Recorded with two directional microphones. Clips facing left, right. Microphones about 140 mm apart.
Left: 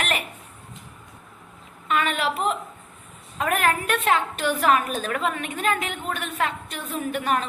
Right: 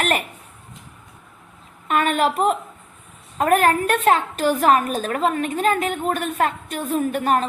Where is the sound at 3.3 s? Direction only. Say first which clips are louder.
Right 6 dB; 40° right (ahead or behind).